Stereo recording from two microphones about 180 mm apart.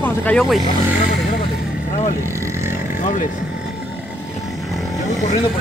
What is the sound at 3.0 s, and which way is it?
Speech, 45° left (ahead or behind).